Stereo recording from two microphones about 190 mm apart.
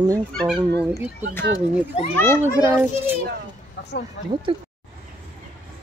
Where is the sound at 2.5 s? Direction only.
15° right (ahead or behind).